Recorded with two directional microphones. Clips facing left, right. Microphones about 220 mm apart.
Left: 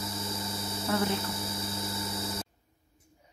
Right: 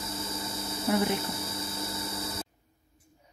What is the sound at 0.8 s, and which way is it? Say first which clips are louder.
Speech: right 3 dB; 15° right (ahead or behind).